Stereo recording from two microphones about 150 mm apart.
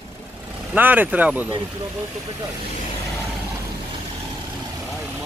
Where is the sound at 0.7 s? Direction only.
10° right (ahead or behind).